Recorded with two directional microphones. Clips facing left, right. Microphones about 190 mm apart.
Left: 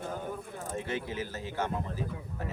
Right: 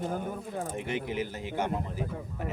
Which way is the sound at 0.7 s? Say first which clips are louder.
Even; 15° right (ahead or behind).